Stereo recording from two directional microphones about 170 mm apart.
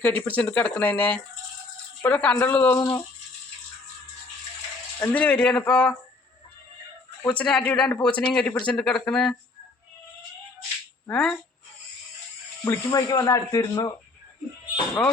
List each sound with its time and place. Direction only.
0.0 s speech: 10° left (ahead or behind)
2.7 s speech: 20° left (ahead or behind)
4.9 s speech: 10° left (ahead or behind)
7.3 s speech: 5° left (ahead or behind)
11.1 s speech: 5° left (ahead or behind)
12.6 s speech: 20° left (ahead or behind)